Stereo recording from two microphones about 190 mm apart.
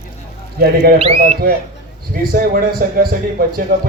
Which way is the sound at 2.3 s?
50° right (ahead or behind).